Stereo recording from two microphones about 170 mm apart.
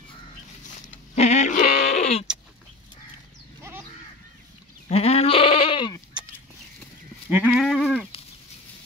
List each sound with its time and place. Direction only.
1.1 s speech: 40° left (ahead or behind)
1.9 s a sound: 40° left (ahead or behind)
4.8 s sheep: 35° left (ahead or behind)
7.2 s sheep: 10° right (ahead or behind)